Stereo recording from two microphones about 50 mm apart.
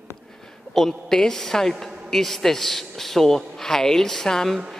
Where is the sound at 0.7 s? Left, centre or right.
Centre.